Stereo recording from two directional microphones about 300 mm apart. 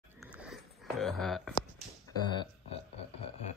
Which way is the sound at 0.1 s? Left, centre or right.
Centre.